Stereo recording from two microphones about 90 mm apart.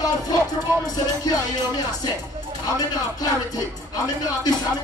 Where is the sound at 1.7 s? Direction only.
45° left (ahead or behind).